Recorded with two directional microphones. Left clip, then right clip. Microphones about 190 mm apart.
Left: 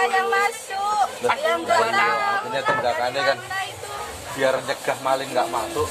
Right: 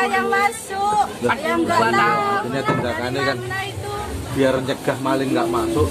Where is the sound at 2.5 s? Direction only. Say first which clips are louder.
Even; 35° left (ahead or behind).